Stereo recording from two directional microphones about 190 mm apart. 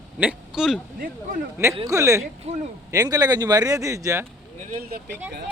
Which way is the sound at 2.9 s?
20° right (ahead or behind).